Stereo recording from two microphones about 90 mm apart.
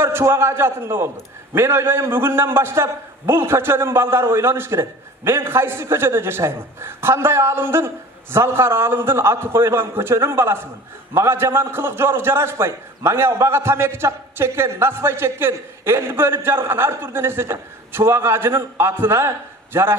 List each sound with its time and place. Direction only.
0.0 s a man's voice: 25° right (ahead or behind)